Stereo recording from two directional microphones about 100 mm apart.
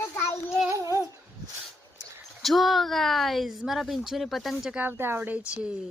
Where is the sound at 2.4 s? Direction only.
Centre (ahead or behind).